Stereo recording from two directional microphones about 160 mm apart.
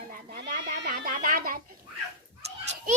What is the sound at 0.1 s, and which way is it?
Goat, 80° right.